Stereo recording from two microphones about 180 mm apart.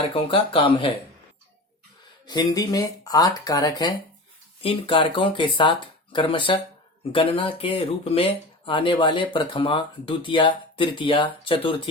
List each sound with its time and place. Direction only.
0.0 s speech: 30° left (ahead or behind)
2.2 s speech: 20° left (ahead or behind)